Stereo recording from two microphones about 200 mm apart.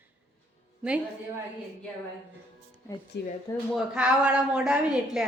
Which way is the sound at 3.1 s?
60° left (ahead or behind).